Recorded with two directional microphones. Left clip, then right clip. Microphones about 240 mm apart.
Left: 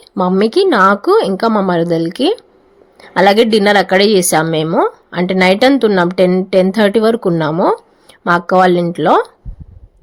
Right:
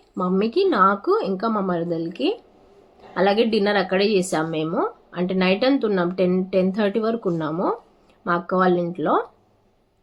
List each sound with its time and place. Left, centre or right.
0.2 s a woman's voice: left